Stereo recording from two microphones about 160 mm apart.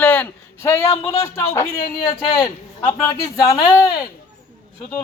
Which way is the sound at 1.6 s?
70° left (ahead or behind).